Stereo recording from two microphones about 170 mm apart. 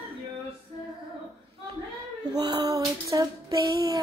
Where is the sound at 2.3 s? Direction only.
25° right (ahead or behind).